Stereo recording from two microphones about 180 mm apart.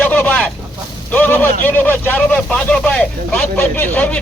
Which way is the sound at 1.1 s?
10° left (ahead or behind).